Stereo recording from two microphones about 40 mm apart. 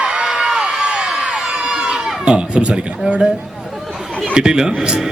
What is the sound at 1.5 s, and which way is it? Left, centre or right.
Run, right.